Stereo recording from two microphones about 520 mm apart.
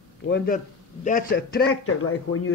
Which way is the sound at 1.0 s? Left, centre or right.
Centre.